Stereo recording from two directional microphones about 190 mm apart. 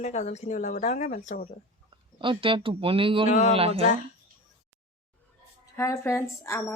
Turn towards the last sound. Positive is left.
turn(degrees=15)  # may be behind; listen again after turning